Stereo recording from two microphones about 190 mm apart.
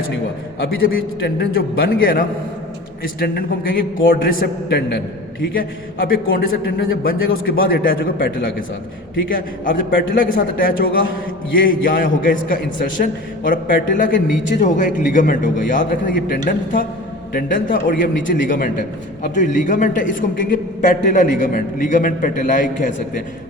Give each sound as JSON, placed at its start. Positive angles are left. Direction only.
{"t": 0.6, "sound": "a man's voice", "side_deg": 50}
{"t": 10.2, "sound": "a man's voice", "side_deg": 45}